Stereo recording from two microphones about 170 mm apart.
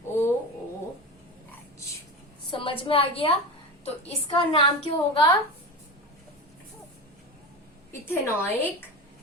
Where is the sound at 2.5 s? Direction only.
30° left (ahead or behind).